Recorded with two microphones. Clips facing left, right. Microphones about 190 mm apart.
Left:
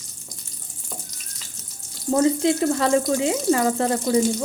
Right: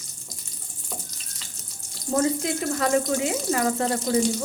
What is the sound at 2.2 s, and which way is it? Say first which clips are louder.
Speech: left 7 dB; 25° left (ahead or behind).